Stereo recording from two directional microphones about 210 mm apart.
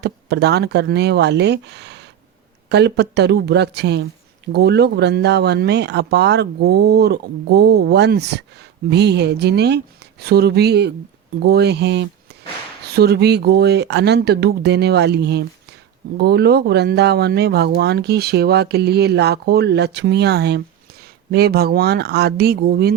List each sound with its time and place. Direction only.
0.0 s speech: 50° right (ahead or behind)